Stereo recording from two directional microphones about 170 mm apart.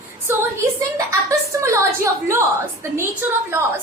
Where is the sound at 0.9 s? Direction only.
20° right (ahead or behind).